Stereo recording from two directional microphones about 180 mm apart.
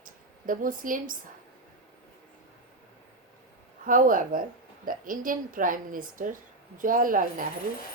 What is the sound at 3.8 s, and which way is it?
Speech, 50° right (ahead or behind).